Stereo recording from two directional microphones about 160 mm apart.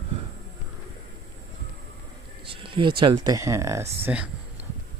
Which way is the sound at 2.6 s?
30° right (ahead or behind).